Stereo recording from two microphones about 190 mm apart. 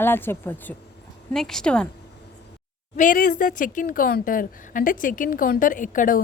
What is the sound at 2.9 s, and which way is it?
A woman's voice, 45° left (ahead or behind).